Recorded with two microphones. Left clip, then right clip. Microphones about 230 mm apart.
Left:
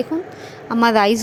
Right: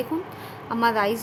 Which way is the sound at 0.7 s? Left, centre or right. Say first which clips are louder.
Left 7 dB; left.